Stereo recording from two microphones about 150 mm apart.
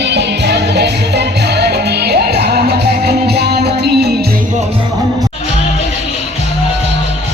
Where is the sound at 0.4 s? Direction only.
90° right.